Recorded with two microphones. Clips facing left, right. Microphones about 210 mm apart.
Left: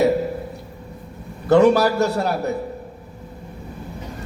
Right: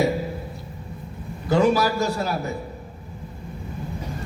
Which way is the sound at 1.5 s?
65° left (ahead or behind).